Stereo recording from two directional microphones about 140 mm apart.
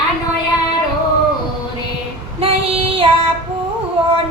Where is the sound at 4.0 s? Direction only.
40° right (ahead or behind).